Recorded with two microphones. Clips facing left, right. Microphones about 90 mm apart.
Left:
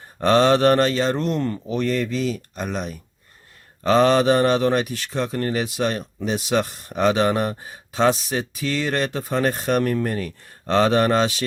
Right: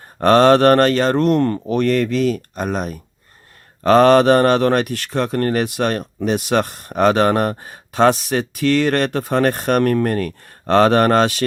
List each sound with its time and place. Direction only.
0.2 s speech: 55° right (ahead or behind)
3.8 s speech: 55° right (ahead or behind)